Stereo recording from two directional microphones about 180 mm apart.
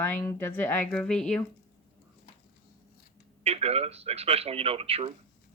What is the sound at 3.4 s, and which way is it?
Speech, 35° right (ahead or behind).